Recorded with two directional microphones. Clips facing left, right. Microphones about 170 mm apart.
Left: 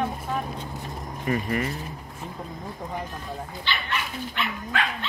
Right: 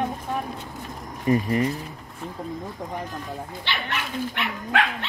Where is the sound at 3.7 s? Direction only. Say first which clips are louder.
Even; 70° right (ahead or behind).